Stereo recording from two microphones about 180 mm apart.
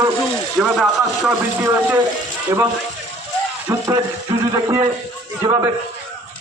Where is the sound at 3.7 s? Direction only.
15° right (ahead or behind).